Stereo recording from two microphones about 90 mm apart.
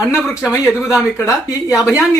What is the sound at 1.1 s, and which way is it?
Speech, 30° left (ahead or behind).